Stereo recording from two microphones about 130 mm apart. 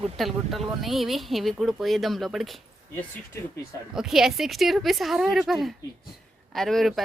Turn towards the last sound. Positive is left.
turn(degrees=0)  # may be behind; listen again after turning